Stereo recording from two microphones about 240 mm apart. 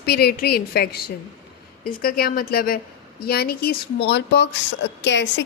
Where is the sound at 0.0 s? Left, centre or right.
Left.